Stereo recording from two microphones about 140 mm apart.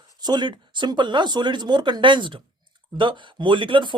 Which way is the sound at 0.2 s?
30° right (ahead or behind).